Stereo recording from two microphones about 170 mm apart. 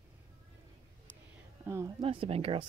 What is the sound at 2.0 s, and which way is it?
Speech, 30° right (ahead or behind).